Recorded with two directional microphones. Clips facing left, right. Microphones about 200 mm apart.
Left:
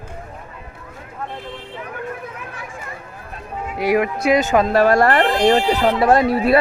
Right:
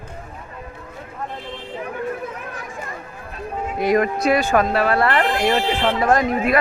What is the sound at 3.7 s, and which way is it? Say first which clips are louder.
Speech: even; 10° left (ahead or behind).